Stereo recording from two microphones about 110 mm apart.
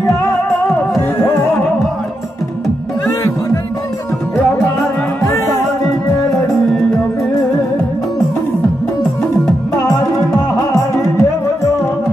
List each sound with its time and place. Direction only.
9.8 s music: 35° left (ahead or behind)